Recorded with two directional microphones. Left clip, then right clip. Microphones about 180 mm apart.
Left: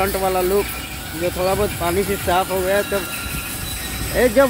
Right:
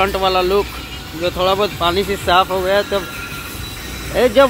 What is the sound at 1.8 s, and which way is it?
Speech, centre (ahead or behind).